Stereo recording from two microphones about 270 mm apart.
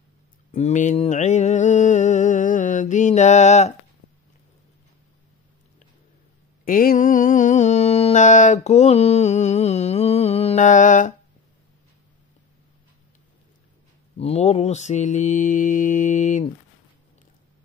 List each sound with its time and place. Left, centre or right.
0.5 s mantra: left
6.6 s music: left
14.1 s mantra: left